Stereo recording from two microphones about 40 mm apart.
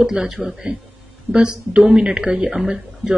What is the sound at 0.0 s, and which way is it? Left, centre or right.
Speech, centre.